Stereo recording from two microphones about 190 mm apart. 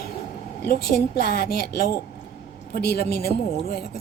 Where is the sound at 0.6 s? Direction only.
55° left (ahead or behind).